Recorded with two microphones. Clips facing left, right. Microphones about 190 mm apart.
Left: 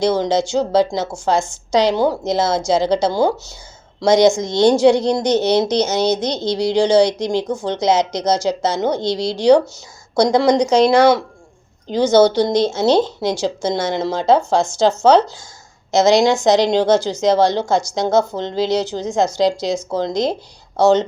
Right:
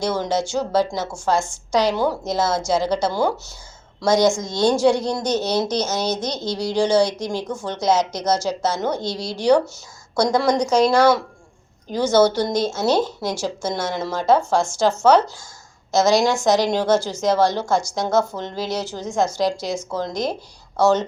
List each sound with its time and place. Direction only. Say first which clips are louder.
0.0 s a woman's voice: left 5 dB; 20° left (ahead or behind)
9.2 s speech: left 6 dB; 75° left (ahead or behind)
10.2 s a woman's voice: left 5 dB; 20° left (ahead or behind)